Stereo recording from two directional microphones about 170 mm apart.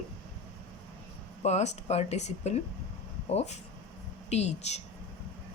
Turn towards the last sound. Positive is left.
turn(degrees=40)  # may be behind; listen again after turning